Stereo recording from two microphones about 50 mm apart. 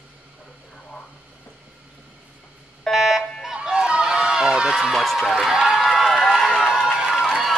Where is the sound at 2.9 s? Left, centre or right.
Centre.